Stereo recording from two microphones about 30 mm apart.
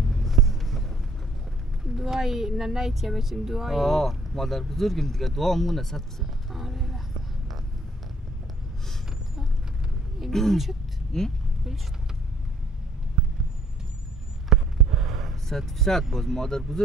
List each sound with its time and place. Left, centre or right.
0.0 s vehicle: centre
2.0 s speech: centre
3.8 s speech: centre
6.5 s clip-clop: centre
10.3 s speech: centre
14.5 s basketball bounce: centre
15.4 s speech: centre
16.4 s speech: centre